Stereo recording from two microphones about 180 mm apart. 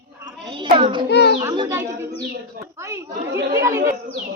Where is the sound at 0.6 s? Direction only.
25° right (ahead or behind).